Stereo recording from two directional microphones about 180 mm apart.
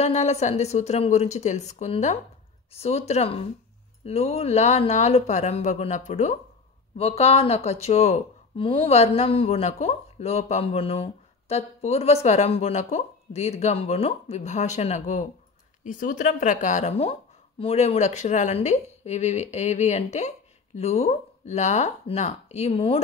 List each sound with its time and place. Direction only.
0.0 s a woman's voice: 35° left (ahead or behind)